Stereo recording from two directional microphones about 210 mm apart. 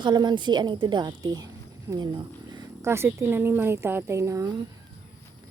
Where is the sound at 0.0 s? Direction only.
20° right (ahead or behind).